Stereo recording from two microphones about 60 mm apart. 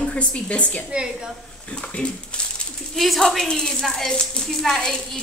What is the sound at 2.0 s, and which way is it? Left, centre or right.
Speech, centre.